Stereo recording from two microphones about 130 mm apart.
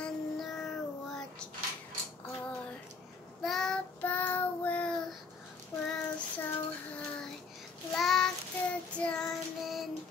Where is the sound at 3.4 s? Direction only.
5° left (ahead or behind).